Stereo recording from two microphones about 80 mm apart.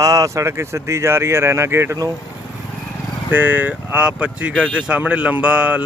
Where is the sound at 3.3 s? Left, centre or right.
Right.